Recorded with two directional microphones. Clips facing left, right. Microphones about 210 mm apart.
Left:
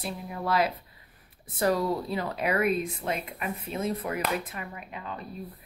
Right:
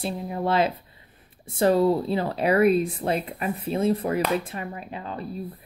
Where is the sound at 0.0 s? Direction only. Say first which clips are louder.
Right 6 dB; 30° right (ahead or behind).